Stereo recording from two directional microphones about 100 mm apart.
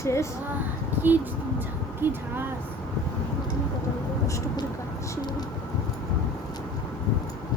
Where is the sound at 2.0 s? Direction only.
20° right (ahead or behind).